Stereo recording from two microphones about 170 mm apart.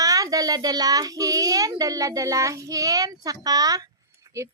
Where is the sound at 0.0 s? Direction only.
20° right (ahead or behind).